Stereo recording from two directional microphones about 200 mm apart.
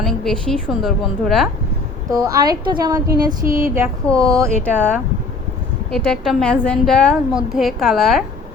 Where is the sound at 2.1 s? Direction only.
15° right (ahead or behind).